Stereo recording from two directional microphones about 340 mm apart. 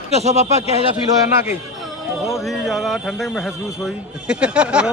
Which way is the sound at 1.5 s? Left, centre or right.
Centre.